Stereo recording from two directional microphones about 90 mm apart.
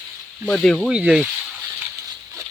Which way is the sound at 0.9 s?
10° right (ahead or behind).